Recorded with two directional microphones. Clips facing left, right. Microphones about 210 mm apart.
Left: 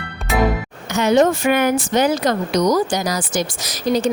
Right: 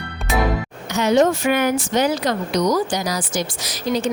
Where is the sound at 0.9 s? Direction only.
55° left (ahead or behind).